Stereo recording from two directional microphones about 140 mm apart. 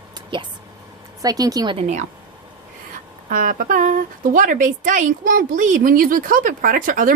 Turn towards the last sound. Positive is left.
turn(degrees=-80)